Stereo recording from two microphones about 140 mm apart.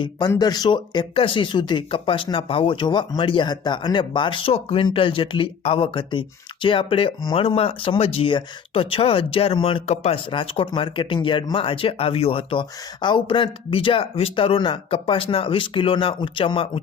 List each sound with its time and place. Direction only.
0.0 s speech: 30° left (ahead or behind)